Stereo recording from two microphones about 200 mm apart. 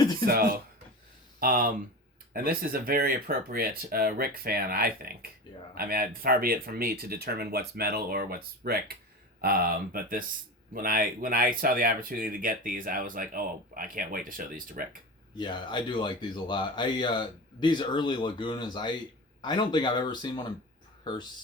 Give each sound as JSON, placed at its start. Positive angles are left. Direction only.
{"t": 0.0, "sound": "a sound", "side_deg": 20}
{"t": 0.3, "sound": "speech", "side_deg": -50}
{"t": 15.4, "sound": "speech", "side_deg": 20}